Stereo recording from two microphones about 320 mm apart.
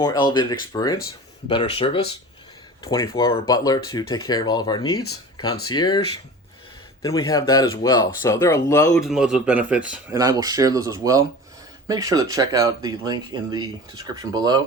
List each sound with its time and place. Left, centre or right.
0.0 s speech: centre
4.9 s speech: left
5.6 s speech: centre
7.3 s speech: centre
9.0 s speech: centre